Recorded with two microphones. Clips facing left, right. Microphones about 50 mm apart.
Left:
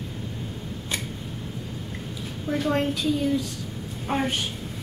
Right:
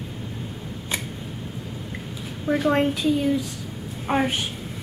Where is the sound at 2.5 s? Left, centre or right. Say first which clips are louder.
Right 4 dB; centre.